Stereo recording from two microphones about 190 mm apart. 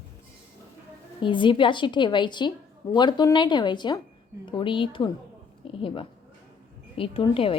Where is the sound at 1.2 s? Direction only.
25° left (ahead or behind).